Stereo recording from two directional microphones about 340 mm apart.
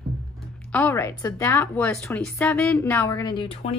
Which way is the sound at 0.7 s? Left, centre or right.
Centre.